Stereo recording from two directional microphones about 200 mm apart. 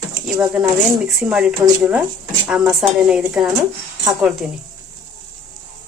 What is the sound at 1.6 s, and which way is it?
Speech, 20° right (ahead or behind).